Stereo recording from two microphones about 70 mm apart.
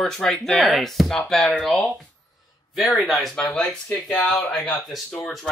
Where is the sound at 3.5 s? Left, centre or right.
Centre.